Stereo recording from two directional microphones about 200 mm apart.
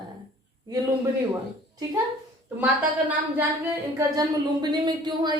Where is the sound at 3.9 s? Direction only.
20° right (ahead or behind).